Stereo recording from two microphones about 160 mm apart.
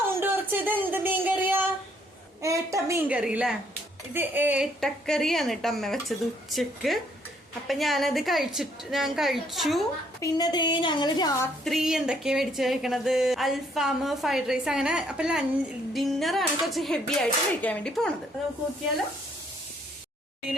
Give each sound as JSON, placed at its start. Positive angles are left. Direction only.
{"t": 0.1, "sound": "a sound", "side_deg": -15}
{"t": 2.4, "sound": "a woman's voice", "side_deg": -20}
{"t": 3.1, "sound": "a woman's voice", "side_deg": -10}
{"t": 10.2, "sound": "a woman's voice", "side_deg": 25}
{"t": 11.6, "sound": "speech", "side_deg": 0}